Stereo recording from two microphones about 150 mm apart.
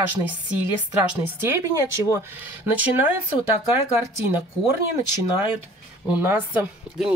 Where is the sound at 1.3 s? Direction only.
15° right (ahead or behind).